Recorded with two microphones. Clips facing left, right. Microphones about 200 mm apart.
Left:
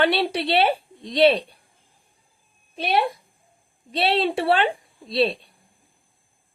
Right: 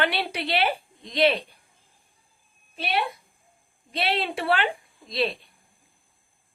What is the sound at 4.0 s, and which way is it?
A woman's voice, 30° left (ahead or behind).